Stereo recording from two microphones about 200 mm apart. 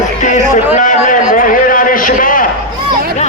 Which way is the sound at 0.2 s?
35° left (ahead or behind).